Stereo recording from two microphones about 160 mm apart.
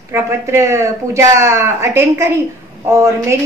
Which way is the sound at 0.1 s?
15° right (ahead or behind).